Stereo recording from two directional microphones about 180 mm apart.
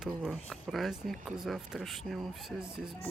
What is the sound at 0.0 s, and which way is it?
Speech, 5° right (ahead or behind).